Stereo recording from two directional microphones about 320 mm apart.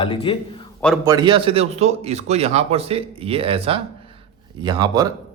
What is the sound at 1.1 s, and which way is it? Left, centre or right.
A man's voice, centre.